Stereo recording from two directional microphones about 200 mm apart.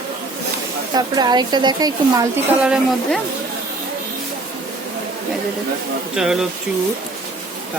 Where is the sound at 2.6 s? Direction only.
5° right (ahead or behind).